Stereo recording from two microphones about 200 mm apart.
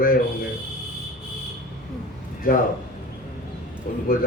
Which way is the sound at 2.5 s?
45° left (ahead or behind).